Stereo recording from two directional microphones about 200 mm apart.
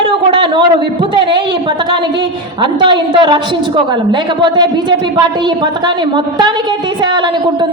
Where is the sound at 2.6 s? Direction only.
25° right (ahead or behind).